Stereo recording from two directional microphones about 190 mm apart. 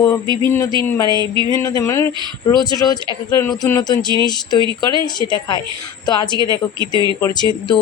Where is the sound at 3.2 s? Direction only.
10° left (ahead or behind).